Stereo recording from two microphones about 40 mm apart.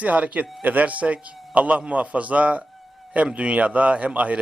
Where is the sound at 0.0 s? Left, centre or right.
Right.